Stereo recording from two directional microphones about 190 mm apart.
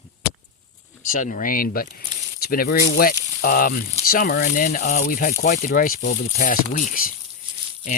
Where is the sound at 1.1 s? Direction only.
45° left (ahead or behind).